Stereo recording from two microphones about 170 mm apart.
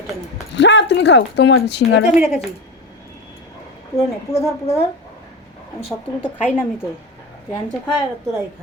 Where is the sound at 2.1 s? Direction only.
5° right (ahead or behind).